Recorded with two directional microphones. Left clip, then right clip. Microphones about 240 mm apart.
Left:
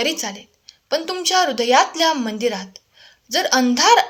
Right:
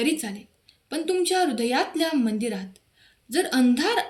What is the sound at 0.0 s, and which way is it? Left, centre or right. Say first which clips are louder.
Speech: left 4 dB; centre.